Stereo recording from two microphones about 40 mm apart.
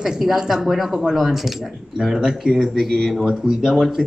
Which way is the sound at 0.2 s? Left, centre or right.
Centre.